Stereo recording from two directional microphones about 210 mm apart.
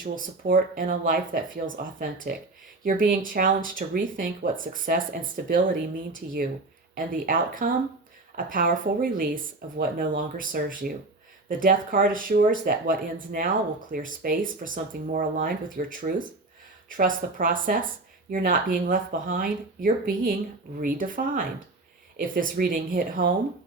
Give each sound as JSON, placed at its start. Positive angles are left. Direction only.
{"t": 0.0, "sound": "speech", "side_deg": -40}